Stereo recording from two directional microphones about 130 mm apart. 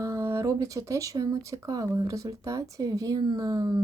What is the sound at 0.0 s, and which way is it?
Speech, 20° right (ahead or behind).